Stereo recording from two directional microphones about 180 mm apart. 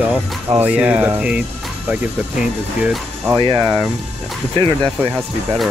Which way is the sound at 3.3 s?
25° right (ahead or behind).